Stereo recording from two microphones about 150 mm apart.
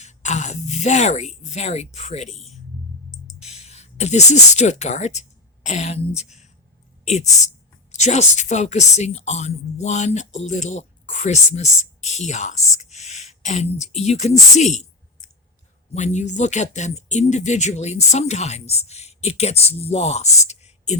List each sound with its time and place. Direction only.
0.0 s speech: 50° left (ahead or behind)
3.4 s speech: 45° left (ahead or behind)